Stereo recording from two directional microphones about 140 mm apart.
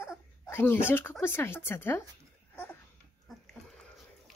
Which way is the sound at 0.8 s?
15° left (ahead or behind).